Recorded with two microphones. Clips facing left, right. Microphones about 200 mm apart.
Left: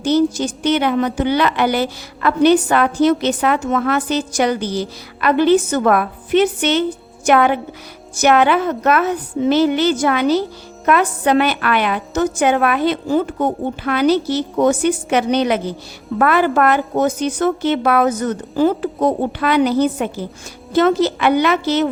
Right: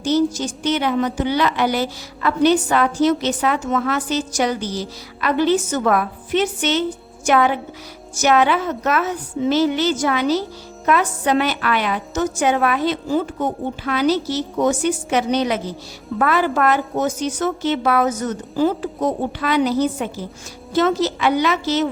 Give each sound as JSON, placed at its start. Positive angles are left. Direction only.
{"t": 0.0, "sound": "a woman's voice", "side_deg": 60}